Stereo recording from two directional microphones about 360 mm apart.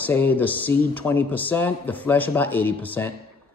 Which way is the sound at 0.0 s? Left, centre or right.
Centre.